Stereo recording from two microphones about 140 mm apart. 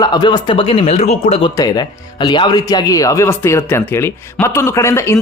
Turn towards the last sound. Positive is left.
turn(degrees=20)  # may be behind; listen again after turning